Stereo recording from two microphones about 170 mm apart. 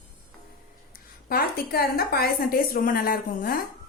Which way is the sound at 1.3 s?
65° left (ahead or behind).